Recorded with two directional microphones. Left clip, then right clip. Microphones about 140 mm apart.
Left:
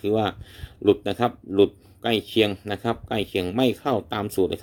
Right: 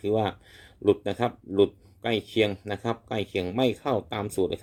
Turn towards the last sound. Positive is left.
turn(degrees=10)  # may be behind; listen again after turning